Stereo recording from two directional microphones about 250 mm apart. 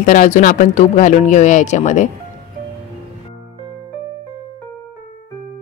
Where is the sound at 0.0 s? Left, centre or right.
Left.